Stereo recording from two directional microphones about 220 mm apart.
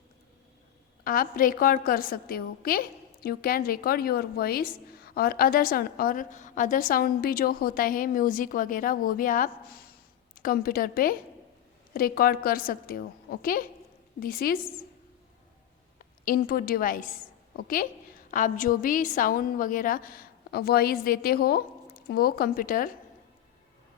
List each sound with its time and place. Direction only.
1.0 s a woman's voice: 40° left (ahead or behind)
16.2 s a woman's voice: 40° left (ahead or behind)